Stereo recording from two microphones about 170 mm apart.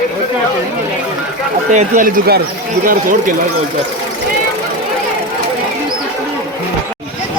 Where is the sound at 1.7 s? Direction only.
50° right (ahead or behind).